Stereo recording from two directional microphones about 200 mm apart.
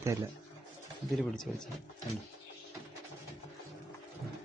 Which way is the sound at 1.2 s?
Centre (ahead or behind).